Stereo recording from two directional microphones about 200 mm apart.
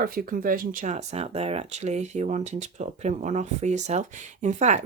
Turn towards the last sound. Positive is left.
turn(degrees=-35)  # may be behind; listen again after turning